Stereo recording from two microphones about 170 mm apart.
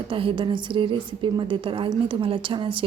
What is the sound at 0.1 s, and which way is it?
A woman's voice, 30° right (ahead or behind).